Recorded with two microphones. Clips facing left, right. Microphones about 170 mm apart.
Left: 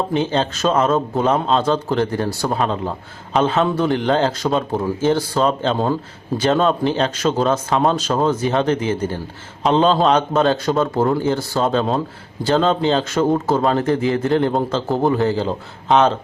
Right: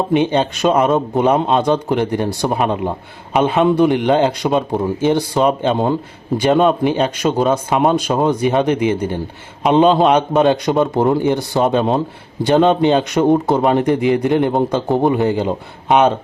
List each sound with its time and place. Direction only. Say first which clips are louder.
0.1 s speech: right 4 dB; 15° right (ahead or behind)